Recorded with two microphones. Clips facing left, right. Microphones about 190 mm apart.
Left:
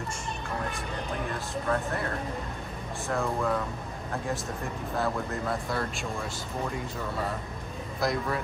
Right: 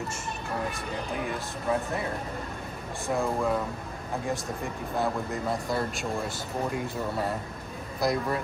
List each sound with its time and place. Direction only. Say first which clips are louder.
1.2 s speech: even; 5° right (ahead or behind)
3.2 s speech: right 1 dB; 10° right (ahead or behind)
5.0 s a man's voice: right 1 dB; 20° right (ahead or behind)
8.0 s speech: right 2 dB; centre (ahead or behind)